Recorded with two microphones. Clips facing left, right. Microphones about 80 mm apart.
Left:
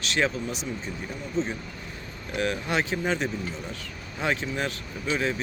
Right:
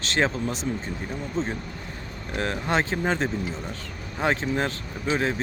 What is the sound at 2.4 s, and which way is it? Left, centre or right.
Speech, right.